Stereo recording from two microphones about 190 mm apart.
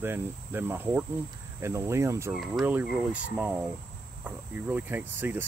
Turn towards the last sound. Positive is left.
turn(degrees=-10)  # may be behind; listen again after turning